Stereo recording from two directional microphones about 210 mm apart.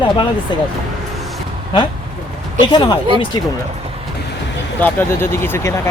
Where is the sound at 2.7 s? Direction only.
20° left (ahead or behind).